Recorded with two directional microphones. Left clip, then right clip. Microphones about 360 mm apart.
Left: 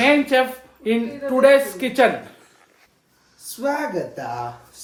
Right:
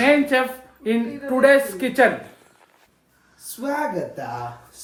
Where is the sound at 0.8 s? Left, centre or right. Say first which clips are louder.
Left 2 dB; centre.